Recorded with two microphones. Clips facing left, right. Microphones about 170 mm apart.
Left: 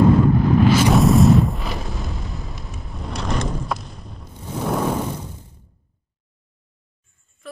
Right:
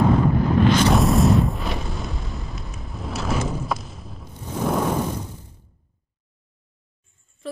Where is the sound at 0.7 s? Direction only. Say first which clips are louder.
Left 2 dB; 5° left (ahead or behind).